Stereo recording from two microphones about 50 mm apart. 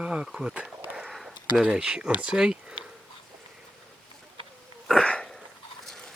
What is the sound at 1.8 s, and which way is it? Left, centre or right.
Speech, centre.